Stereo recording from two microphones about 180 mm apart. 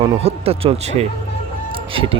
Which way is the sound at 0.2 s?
35° right (ahead or behind).